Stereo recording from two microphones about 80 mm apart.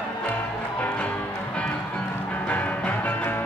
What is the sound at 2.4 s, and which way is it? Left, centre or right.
Music, centre.